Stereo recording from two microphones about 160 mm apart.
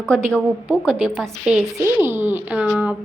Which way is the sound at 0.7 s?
10° right (ahead or behind).